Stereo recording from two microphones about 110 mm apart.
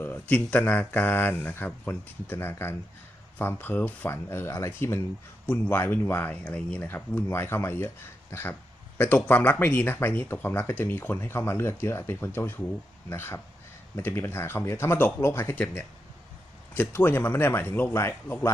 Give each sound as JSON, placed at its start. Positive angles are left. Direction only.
{"t": 0.0, "sound": "speech", "side_deg": 15}
{"t": 8.3, "sound": "a sound", "side_deg": 20}
{"t": 9.0, "sound": "speech", "side_deg": 15}